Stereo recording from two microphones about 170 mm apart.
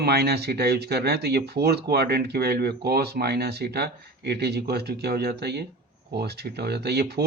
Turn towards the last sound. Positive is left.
turn(degrees=-70)  # may be behind; listen again after turning